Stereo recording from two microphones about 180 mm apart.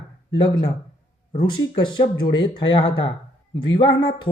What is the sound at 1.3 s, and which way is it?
Speech, 25° left (ahead or behind).